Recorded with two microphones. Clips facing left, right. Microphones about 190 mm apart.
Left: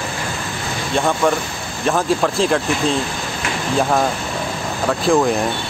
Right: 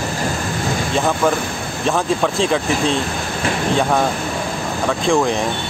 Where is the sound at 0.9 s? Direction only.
Centre (ahead or behind).